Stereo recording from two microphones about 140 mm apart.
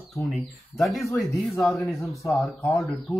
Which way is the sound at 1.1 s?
10° left (ahead or behind).